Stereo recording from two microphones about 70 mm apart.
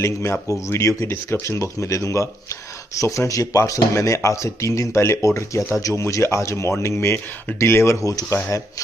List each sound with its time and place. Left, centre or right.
0.0 s speech: left